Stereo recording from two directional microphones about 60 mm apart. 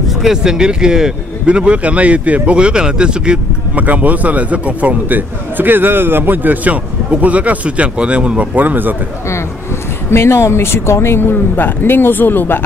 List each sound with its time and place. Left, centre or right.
0.2 s speech: centre
3.7 s a man's voice: right
8.5 s a man's voice: right
10.1 s speech: left